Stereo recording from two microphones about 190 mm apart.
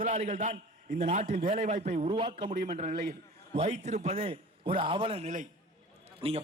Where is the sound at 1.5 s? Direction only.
40° right (ahead or behind).